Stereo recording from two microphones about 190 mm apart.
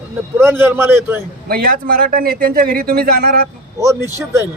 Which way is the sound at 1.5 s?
55° right (ahead or behind).